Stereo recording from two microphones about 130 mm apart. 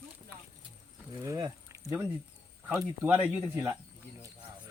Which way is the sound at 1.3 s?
25° right (ahead or behind).